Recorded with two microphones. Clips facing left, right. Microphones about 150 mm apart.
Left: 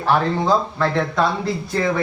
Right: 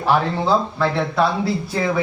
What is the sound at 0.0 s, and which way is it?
A man's voice, 10° right (ahead or behind).